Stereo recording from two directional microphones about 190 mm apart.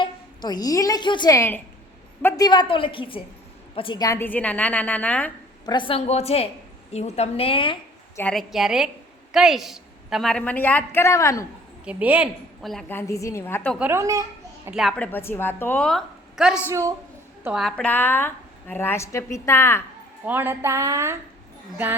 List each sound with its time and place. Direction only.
0.0 s a woman's voice: 20° left (ahead or behind)
5.6 s a woman's voice: 25° left (ahead or behind)
8.1 s a woman's voice: 5° left (ahead or behind)
11.9 s a woman's voice: 5° right (ahead or behind)
12.9 s a woman's voice: 15° left (ahead or behind)
13.7 s a child's voice: 10° right (ahead or behind)
14.7 s a woman's voice: centre (ahead or behind)
20.2 s speech: 10° right (ahead or behind)